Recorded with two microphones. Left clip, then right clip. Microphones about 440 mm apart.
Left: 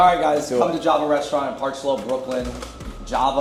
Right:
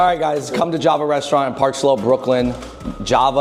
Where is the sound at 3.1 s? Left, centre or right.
Right.